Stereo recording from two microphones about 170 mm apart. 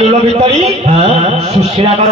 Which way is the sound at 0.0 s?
35° right (ahead or behind).